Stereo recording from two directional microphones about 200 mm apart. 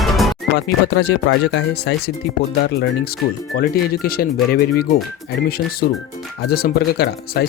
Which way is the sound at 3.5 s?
50° left (ahead or behind).